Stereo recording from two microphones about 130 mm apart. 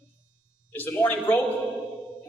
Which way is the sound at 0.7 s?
15° left (ahead or behind).